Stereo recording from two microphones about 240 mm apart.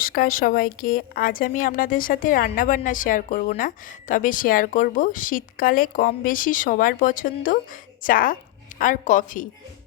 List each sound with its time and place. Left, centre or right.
0.0 s speech: left